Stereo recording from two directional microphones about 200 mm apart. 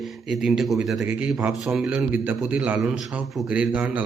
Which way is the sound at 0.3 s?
Centre (ahead or behind).